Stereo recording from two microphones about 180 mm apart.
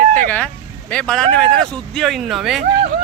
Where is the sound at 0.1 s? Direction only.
10° left (ahead or behind).